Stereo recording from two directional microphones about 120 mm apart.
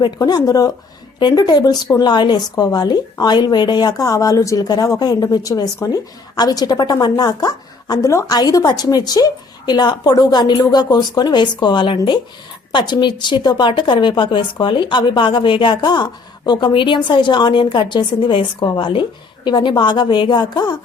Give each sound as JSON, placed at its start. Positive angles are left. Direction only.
{"t": 0.0, "sound": "speech", "side_deg": 35}